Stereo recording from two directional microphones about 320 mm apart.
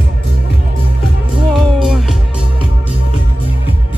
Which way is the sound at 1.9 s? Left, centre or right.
Centre.